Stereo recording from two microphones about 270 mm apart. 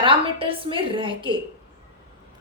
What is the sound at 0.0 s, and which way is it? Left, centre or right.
A woman's voice, centre.